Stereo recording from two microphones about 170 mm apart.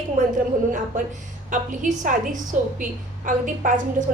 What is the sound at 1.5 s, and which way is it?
Speech, 50° right (ahead or behind).